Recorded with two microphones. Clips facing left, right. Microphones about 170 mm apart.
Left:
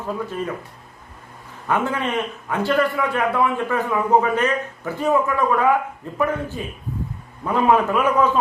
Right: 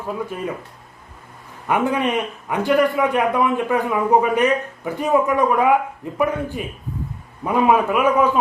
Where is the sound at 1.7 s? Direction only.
15° right (ahead or behind).